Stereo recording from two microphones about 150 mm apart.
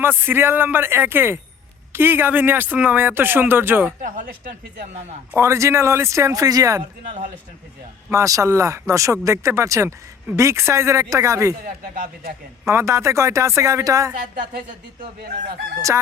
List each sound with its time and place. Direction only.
0.0 s speech: 15° right (ahead or behind)
5.3 s speech: 20° right (ahead or behind)
7.0 s speech: 55° right (ahead or behind)
8.1 s speech: 20° right (ahead or behind)
11.9 s speech: 65° right (ahead or behind)
12.6 s speech: 20° right (ahead or behind)